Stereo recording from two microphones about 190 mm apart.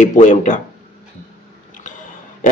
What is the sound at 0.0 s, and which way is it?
Speech, 40° left (ahead or behind).